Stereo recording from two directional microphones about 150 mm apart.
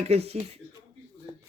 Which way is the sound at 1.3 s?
25° right (ahead or behind).